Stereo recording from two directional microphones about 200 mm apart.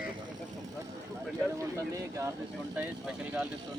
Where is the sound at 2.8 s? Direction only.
5° right (ahead or behind).